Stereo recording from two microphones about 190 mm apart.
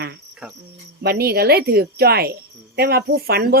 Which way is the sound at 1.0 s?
55° right (ahead or behind).